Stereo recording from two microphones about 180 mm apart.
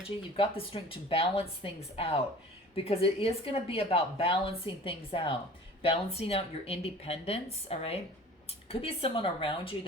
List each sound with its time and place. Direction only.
0.2 s a woman's voice: 30° left (ahead or behind)